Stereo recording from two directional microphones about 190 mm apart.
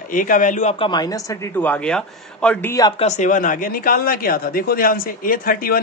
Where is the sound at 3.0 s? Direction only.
40° left (ahead or behind).